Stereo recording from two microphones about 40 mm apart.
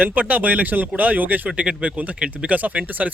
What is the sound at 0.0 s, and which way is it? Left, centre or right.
Speech, right.